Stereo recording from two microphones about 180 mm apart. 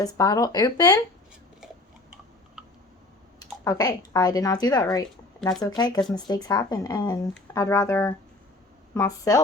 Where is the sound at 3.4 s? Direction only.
20° left (ahead or behind).